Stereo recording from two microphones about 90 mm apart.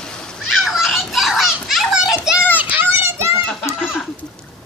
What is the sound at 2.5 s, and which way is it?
Children playing, 20° right (ahead or behind).